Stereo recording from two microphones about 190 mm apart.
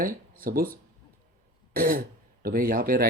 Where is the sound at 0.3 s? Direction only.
50° right (ahead or behind).